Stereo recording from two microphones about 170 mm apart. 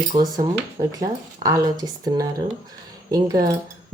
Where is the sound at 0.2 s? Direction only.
25° right (ahead or behind).